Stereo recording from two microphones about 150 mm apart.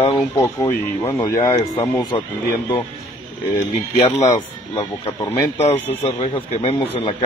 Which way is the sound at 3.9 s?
45° left (ahead or behind).